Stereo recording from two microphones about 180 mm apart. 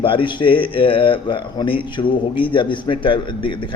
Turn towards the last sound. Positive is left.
turn(degrees=30)  # may be behind; listen again after turning